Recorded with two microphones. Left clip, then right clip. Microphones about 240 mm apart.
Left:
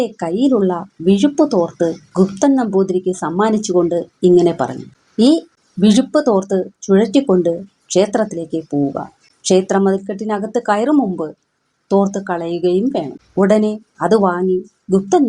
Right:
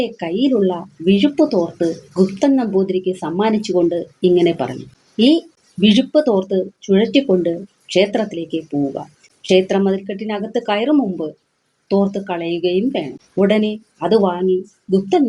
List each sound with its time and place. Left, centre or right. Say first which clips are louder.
0.0 s speech: left 2 dB; left